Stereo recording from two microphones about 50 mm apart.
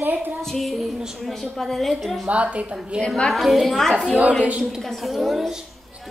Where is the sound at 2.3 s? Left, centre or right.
Right.